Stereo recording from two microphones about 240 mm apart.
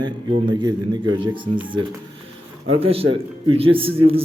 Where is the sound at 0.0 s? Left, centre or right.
Centre.